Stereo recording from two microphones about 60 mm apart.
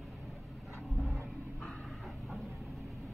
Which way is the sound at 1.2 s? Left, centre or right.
Centre.